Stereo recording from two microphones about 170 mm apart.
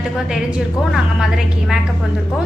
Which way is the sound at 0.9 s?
Centre (ahead or behind).